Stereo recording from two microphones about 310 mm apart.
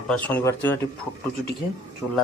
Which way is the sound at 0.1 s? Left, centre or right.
Centre.